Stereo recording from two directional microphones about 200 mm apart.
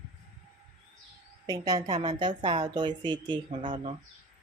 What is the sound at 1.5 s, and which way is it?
A woman's voice, 20° right (ahead or behind).